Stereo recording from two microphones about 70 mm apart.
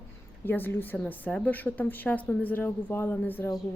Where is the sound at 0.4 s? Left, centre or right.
Left.